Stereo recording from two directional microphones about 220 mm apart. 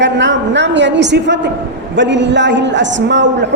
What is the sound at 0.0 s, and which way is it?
A woman's voice, 55° right (ahead or behind).